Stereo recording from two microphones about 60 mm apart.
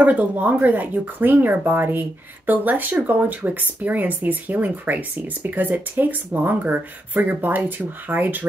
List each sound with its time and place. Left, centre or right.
0.0 s speech: right